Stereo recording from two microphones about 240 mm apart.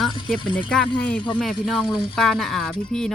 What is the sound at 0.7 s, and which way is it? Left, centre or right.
Speech, centre.